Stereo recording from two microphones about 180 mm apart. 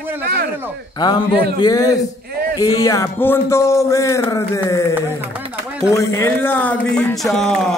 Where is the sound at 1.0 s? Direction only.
25° left (ahead or behind).